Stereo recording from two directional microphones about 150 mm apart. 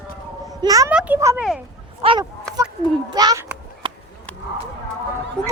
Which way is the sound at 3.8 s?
35° right (ahead or behind).